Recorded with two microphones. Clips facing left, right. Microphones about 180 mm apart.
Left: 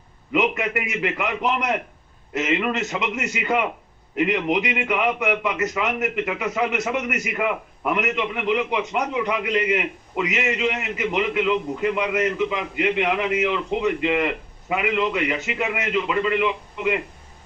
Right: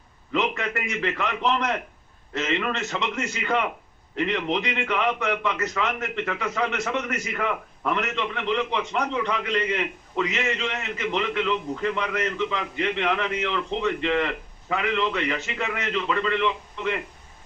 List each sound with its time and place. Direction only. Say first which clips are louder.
0.3 s a man's voice: left 4 dB; 15° left (ahead or behind)